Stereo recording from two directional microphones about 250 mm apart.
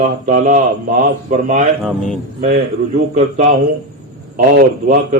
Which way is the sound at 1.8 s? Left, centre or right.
Centre.